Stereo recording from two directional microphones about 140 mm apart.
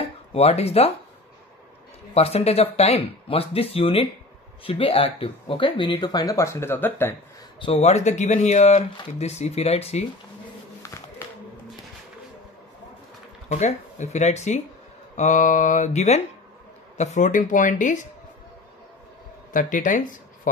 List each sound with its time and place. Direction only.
0.3 s speech: 45° left (ahead or behind)
2.1 s speech: 45° left (ahead or behind); by 7.2 s 15° left (ahead or behind)
7.7 s speech: 55° left (ahead or behind)
10.8 s a sound: 20° left (ahead or behind)
13.5 s speech: 55° left (ahead or behind)
19.5 s speech: 70° left (ahead or behind)